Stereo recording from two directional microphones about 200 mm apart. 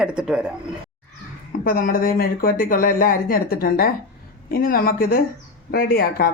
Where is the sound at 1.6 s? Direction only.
45° left (ahead or behind).